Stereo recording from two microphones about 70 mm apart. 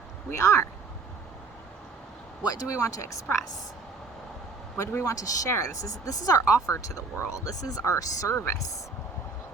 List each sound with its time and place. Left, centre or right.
0.3 s speech: left
2.4 s speech: left
4.9 s speech: left
5.1 s speech: left
8.4 s speech: left